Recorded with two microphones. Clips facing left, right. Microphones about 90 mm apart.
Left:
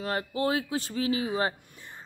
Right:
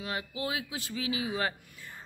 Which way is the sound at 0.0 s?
45° left (ahead or behind).